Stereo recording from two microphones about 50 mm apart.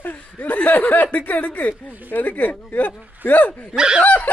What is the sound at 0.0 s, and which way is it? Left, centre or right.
A man's voice, left.